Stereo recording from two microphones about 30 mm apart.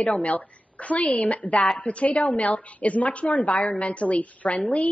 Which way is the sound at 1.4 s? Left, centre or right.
Left.